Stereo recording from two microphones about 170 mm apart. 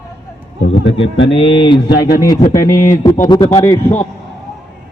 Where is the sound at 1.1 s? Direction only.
90° left.